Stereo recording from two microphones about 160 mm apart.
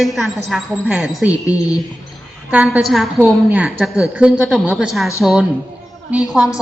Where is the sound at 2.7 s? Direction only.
Centre (ahead or behind).